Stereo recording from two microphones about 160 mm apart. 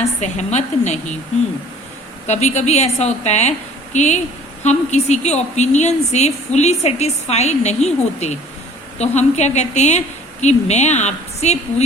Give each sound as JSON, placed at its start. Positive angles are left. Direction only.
{"t": 0.0, "sound": "a woman's voice", "side_deg": 45}
{"t": 2.2, "sound": "a woman's voice", "side_deg": 45}